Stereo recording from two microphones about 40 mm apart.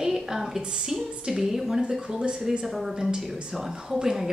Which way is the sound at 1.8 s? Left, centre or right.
Centre.